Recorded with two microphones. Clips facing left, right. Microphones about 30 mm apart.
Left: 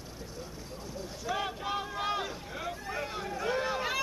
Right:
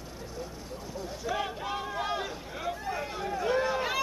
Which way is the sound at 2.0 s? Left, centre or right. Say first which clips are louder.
Right 1 dB; centre.